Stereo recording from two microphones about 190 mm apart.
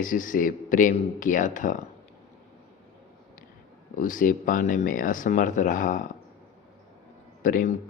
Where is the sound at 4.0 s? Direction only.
45° left (ahead or behind).